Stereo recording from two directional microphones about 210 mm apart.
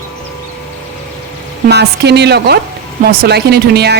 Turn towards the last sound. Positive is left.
turn(degrees=-50)  # may be behind; listen again after turning